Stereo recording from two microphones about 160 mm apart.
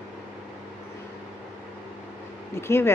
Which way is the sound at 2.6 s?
15° left (ahead or behind).